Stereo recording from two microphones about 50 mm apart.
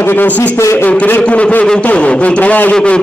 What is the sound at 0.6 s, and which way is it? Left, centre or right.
Speech, left.